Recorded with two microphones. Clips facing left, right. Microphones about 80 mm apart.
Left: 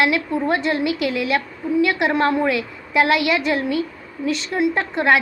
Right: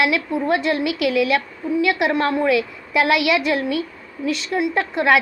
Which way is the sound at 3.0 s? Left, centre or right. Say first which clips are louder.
Even; left.